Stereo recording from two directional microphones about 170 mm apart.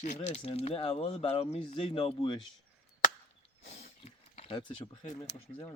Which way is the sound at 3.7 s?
35° left (ahead or behind).